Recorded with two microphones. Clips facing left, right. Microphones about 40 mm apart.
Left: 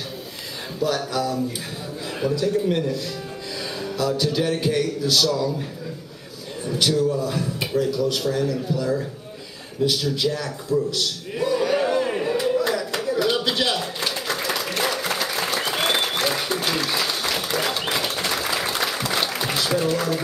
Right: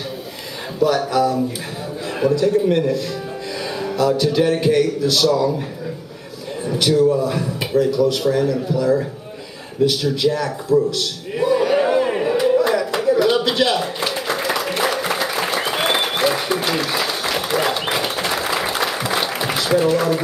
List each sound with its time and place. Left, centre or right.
0.8 s a man's voice: centre
3.8 s a man's voice: centre
6.6 s a man's voice: centre
11.3 s a sound: centre